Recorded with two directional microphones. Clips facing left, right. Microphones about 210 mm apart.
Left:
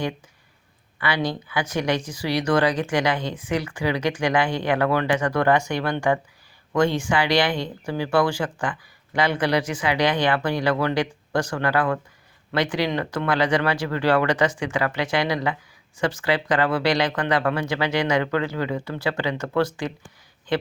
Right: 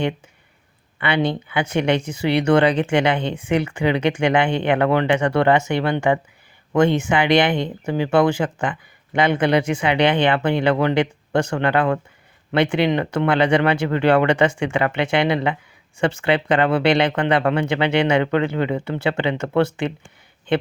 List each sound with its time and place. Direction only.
0.9 s speech: 25° right (ahead or behind)